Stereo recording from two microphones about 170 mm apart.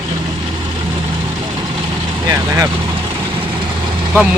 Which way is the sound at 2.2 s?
20° right (ahead or behind).